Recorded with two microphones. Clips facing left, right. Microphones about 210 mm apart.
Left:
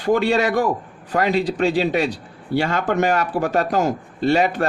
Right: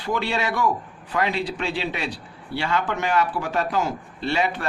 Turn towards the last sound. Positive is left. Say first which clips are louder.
# left 7 dB
turn(degrees=45)  # may be behind; listen again after turning